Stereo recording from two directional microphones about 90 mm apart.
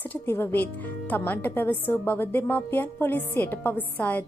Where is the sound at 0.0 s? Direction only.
25° left (ahead or behind).